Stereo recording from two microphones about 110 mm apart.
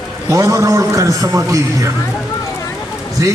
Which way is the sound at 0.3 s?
30° right (ahead or behind).